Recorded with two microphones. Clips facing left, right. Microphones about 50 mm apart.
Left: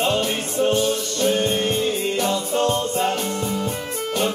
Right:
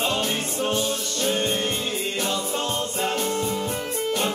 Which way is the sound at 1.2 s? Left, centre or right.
Left.